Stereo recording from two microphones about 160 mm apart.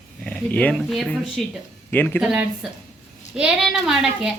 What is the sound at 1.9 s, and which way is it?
Speech, 10° left (ahead or behind).